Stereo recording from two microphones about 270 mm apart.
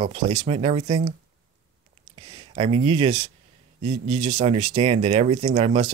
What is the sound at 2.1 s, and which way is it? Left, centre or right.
Speech, centre.